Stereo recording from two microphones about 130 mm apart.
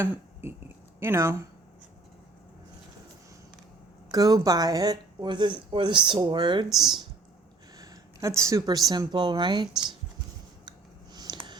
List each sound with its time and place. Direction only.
0.9 s speech: 20° right (ahead or behind)
4.1 s speech: 30° right (ahead or behind)
10.7 s a sound: 35° right (ahead or behind)